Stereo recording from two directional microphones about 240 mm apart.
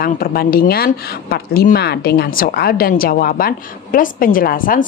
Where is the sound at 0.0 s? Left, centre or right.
Left.